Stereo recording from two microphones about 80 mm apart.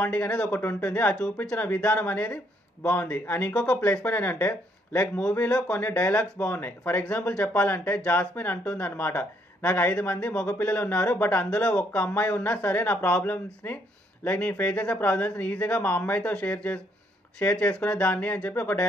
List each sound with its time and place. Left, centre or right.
0.0 s speech: centre
0.6 s speech: left
5.0 s speech: centre